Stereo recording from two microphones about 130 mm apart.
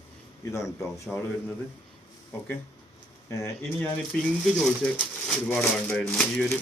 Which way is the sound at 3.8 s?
5° left (ahead or behind).